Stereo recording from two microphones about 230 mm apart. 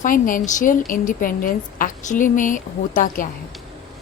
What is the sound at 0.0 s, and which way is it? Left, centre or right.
A woman's voice, left.